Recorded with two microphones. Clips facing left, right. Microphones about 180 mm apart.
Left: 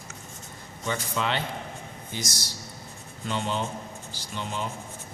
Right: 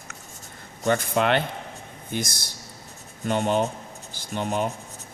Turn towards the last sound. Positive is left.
turn(degrees=-55)  # may be behind; listen again after turning